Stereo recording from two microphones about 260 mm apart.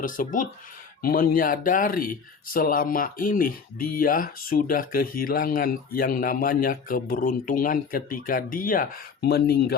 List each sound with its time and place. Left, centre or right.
0.0 s speech: left